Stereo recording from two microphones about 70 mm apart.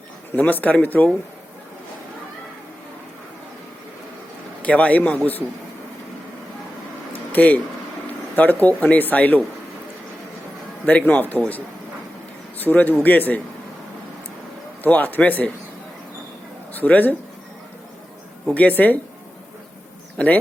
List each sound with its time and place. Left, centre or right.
0.3 s speech: left
4.6 s speech: centre
7.1 s a sound: left
8.4 s speech: left
10.8 s speech: left
14.8 s speech: left
16.7 s speech: left
18.5 s speech: left
20.1 s speech: left